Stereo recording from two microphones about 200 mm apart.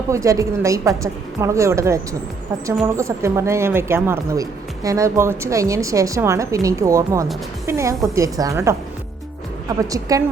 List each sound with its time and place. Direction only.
0.1 s speech: 15° right (ahead or behind)
3.0 s speech: 15° right (ahead or behind)